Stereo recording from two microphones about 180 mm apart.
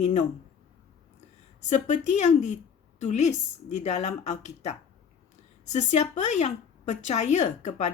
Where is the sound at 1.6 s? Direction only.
40° left (ahead or behind).